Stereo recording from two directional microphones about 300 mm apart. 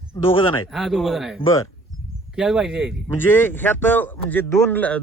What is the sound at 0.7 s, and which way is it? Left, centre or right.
A man's voice, centre.